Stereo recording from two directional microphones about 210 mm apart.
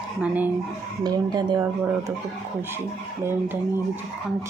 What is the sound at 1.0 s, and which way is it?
Speech, 20° right (ahead or behind).